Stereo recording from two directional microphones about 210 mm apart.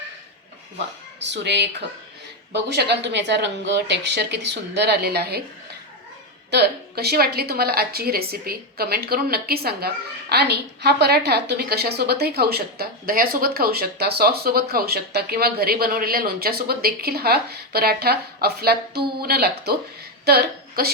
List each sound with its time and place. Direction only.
1.2 s a woman's voice: 55° right (ahead or behind)
6.5 s a woman's voice: 50° right (ahead or behind)